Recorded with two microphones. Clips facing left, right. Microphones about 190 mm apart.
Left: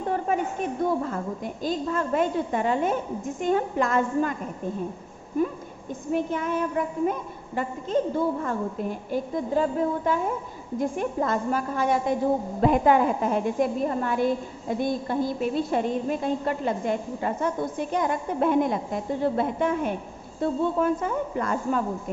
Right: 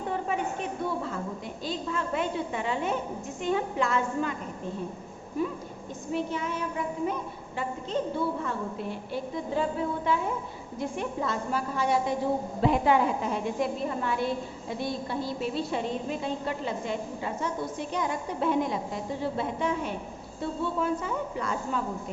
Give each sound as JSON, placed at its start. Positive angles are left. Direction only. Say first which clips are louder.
{"t": 0.3, "sound": "a woman's voice", "louder": "left 4 dB", "side_deg": 45}
{"t": 5.4, "sound": "a woman's voice", "louder": "left 5 dB", "side_deg": 50}